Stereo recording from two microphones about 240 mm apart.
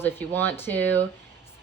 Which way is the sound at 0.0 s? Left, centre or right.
Centre.